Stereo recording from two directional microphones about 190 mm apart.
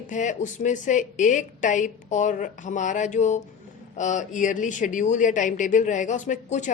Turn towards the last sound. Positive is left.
turn(degrees=40)  # may be behind; listen again after turning